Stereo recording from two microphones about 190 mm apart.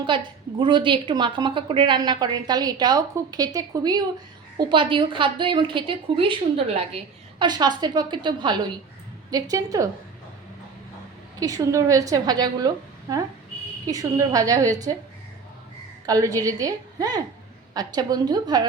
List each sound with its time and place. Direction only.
0.0 s a woman's voice: 25° right (ahead or behind)
11.3 s a woman's voice: 20° right (ahead or behind)
16.0 s a woman's voice: 20° right (ahead or behind)